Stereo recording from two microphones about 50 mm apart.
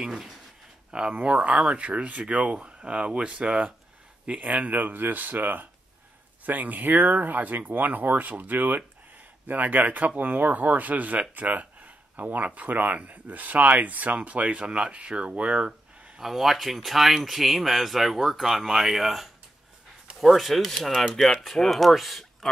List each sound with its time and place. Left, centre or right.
0.0 s speech: centre
0.9 s speech: right
16.2 s speech: centre